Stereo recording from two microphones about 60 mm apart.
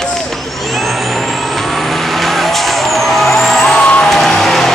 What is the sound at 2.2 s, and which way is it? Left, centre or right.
Vehicle, centre.